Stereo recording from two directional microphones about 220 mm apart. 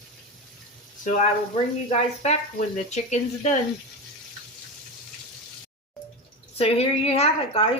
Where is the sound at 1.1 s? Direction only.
35° left (ahead or behind).